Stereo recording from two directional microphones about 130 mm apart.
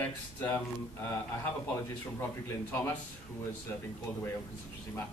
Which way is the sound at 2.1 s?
20° left (ahead or behind).